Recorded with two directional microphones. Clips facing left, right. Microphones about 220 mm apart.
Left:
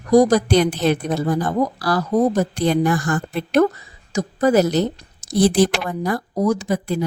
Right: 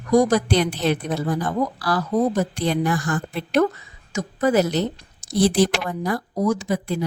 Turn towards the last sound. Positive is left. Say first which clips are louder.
# left 2 dB
turn(degrees=45)  # may be behind; listen again after turning